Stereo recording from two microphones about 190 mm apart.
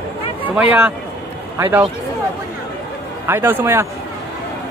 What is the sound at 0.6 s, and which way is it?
A man's voice, 10° right (ahead or behind).